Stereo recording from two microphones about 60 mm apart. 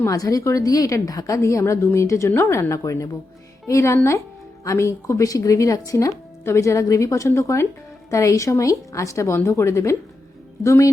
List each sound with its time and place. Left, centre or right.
0.1 s a woman's voice: left
1.4 s a woman's voice: left
6.4 s a woman's voice: left